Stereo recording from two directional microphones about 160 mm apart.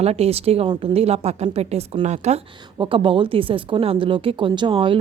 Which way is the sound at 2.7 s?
35° right (ahead or behind).